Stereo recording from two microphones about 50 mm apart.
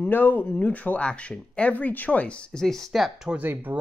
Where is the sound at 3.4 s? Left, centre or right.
Right.